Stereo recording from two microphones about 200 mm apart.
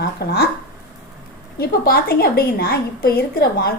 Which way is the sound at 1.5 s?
50° left (ahead or behind).